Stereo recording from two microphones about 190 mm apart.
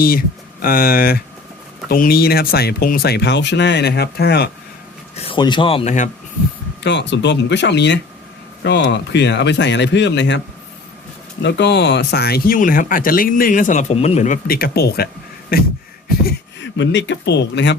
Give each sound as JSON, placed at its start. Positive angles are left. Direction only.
{"t": 0.0, "sound": "speech", "side_deg": 50}
{"t": 5.1, "sound": "speech", "side_deg": 30}
{"t": 6.8, "sound": "speech", "side_deg": 70}
{"t": 11.4, "sound": "speech", "side_deg": 65}